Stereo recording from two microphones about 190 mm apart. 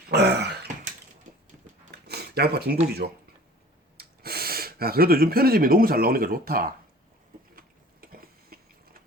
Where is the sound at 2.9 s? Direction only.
60° right (ahead or behind).